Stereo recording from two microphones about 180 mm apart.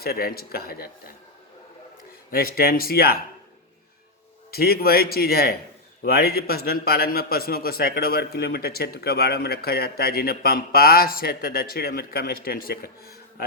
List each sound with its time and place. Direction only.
0.0 s a man's voice: 60° left (ahead or behind)
2.3 s a man's voice: 55° left (ahead or behind)
4.5 s a man's voice: 60° left (ahead or behind)